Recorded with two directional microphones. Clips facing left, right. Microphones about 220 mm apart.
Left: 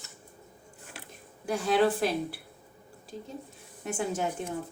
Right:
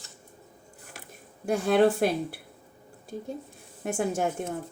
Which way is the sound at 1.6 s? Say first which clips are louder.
Right 3 dB; 55° right (ahead or behind).